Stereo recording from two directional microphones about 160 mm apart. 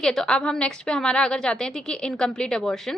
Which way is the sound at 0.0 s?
5° left (ahead or behind).